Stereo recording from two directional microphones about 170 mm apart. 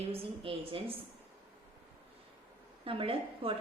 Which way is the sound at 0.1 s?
35° right (ahead or behind).